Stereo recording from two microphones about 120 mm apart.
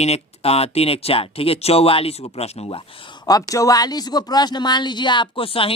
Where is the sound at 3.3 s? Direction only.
30° left (ahead or behind).